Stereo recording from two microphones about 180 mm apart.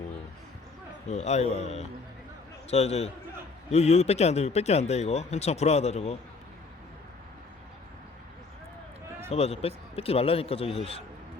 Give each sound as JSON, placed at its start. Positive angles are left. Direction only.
{"t": 1.0, "sound": "speech", "side_deg": 40}
{"t": 9.3, "sound": "speech", "side_deg": 35}